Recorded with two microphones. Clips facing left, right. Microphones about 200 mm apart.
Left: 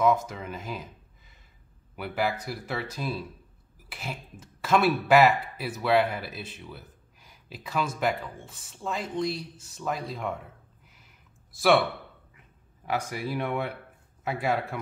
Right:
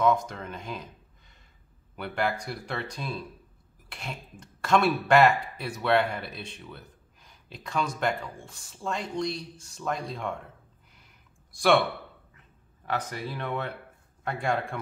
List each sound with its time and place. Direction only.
0.0 s speech: 5° left (ahead or behind)
11.5 s speech: centre (ahead or behind)
12.8 s speech: 10° left (ahead or behind)